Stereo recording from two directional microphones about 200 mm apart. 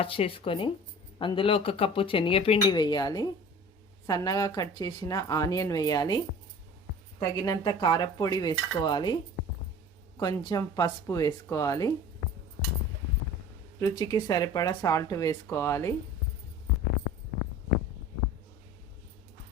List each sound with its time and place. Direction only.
0.0 s speech: 30° left (ahead or behind)
10.2 s speech: 20° left (ahead or behind)
13.7 s speech: 20° left (ahead or behind)